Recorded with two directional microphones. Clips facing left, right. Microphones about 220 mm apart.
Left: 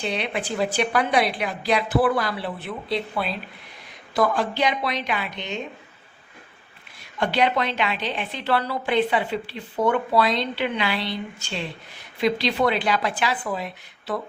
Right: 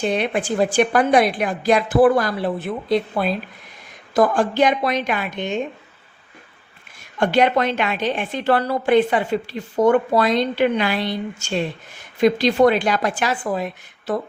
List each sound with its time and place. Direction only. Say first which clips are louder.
0.0 s a woman's voice: right 6 dB; 45° right (ahead or behind)
7.2 s a woman's voice: right 5 dB; 45° right (ahead or behind)